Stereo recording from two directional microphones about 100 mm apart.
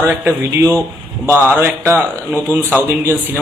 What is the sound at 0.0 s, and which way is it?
A man's voice, 20° right (ahead or behind).